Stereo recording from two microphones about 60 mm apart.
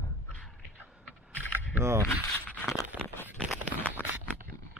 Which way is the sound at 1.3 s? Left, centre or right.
Left.